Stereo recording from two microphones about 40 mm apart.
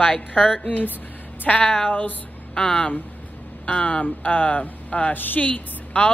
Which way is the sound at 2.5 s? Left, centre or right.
Centre.